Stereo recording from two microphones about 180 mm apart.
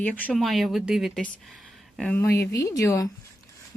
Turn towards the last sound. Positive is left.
turn(degrees=20)  # may be behind; listen again after turning